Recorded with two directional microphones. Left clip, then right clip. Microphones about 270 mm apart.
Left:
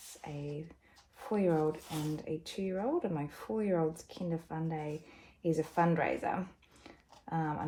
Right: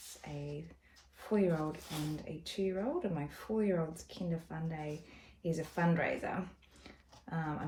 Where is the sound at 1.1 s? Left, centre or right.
Left.